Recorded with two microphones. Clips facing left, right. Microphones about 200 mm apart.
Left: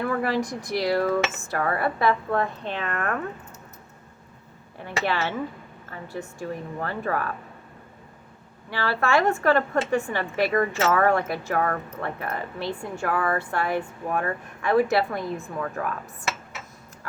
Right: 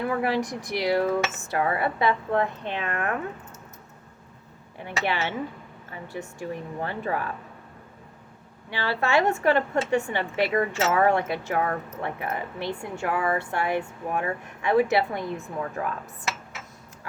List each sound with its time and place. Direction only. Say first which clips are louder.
0.0 s speech: even; 15° right (ahead or behind)
4.8 s speech: left 1 dB; 20° right (ahead or behind)
8.7 s speech: left 1 dB; 20° right (ahead or behind)